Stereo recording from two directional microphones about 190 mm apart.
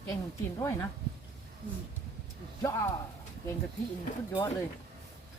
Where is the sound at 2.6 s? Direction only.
15° left (ahead or behind).